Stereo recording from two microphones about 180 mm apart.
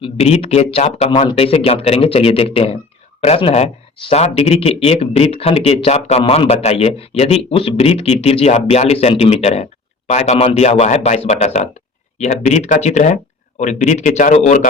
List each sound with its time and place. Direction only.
0.0 s speech: 35° left (ahead or behind)
1.1 s a man's voice: 25° left (ahead or behind); by 14.7 s 45° left (ahead or behind)